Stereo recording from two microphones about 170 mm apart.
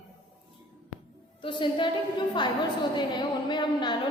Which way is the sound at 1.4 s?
30° left (ahead or behind).